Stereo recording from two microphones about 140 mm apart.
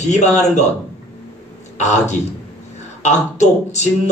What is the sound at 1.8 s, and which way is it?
A man's voice, 55° left (ahead or behind).